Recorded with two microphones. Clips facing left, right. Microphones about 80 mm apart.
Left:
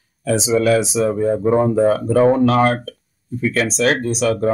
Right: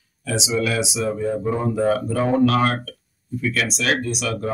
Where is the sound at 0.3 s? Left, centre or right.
Left.